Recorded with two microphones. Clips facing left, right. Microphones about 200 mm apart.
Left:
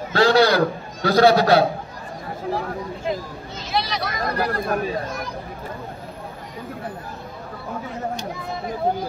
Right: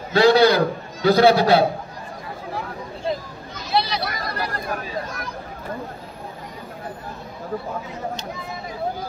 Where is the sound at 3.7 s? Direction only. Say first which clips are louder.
Right 2 dB; 30° right (ahead or behind).